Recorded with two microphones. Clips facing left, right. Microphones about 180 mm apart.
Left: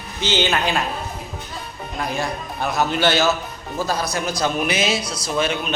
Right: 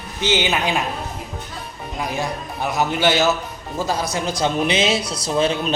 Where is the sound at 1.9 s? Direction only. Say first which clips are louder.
Even; 15° right (ahead or behind); by 5.8 s 30° right (ahead or behind).